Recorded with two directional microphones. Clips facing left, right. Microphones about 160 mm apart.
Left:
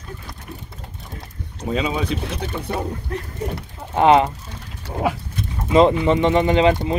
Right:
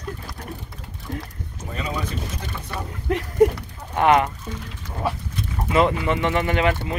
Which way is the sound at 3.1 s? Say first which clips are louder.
Right 10 dB; 90° right.